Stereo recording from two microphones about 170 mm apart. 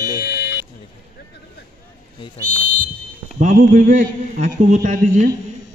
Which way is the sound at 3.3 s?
50° right (ahead or behind).